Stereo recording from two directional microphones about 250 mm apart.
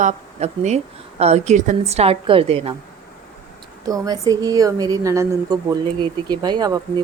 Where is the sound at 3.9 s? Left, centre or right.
Centre.